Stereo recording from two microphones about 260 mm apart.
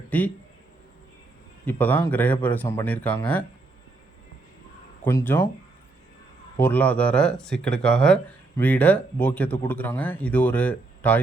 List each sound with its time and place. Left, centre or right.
0.1 s speech: centre
1.6 s speech: centre
5.0 s speech: centre
6.6 s speech: centre